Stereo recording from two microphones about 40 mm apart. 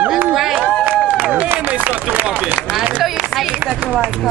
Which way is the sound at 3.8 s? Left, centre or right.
Right.